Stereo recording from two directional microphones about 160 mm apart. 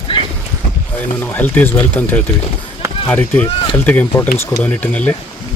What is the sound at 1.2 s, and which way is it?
A man's voice, 10° left (ahead or behind).